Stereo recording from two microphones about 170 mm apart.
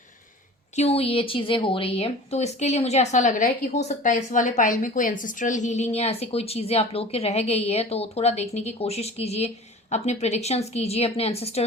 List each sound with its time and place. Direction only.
0.8 s a woman's voice: 35° left (ahead or behind)